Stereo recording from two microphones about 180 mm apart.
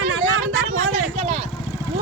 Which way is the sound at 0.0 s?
90° right.